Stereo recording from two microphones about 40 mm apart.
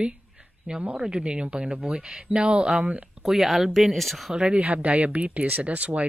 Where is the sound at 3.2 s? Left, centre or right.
Centre.